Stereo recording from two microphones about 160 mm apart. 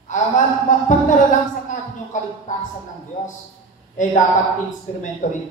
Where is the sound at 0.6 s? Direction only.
50° left (ahead or behind).